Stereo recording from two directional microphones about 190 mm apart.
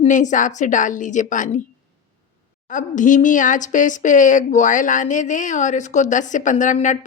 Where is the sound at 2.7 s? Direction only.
45° left (ahead or behind).